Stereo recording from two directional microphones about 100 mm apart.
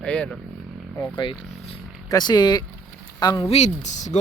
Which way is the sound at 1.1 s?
50° left (ahead or behind).